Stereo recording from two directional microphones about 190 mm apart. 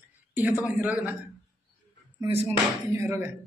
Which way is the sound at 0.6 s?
10° right (ahead or behind).